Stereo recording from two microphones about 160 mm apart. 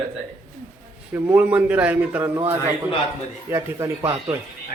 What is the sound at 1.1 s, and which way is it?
Speech, 10° right (ahead or behind).